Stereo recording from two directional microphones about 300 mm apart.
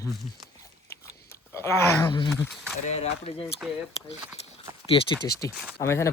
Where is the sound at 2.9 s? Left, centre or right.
Centre.